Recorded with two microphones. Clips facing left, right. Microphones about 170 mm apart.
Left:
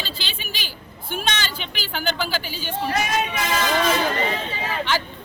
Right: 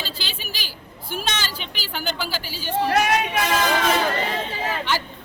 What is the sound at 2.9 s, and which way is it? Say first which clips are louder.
Speech: right 3 dB; 70° right (ahead or behind).